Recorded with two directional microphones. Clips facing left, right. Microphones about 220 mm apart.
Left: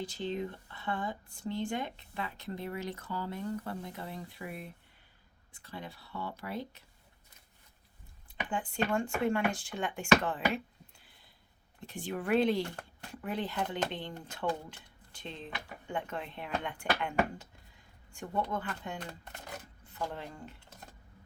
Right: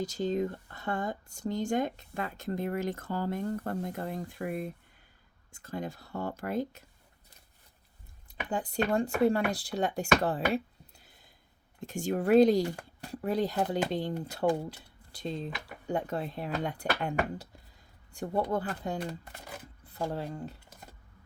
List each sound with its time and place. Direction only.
0.0 s speech: 40° right (ahead or behind)
8.4 s speech: 40° right (ahead or behind)